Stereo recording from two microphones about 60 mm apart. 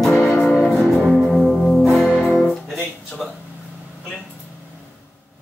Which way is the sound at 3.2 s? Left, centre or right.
Centre.